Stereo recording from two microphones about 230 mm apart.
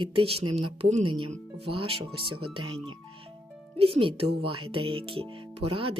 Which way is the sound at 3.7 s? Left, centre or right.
Right.